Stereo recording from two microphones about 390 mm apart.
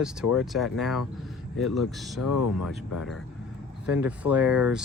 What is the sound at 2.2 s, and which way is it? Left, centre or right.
Speech, left.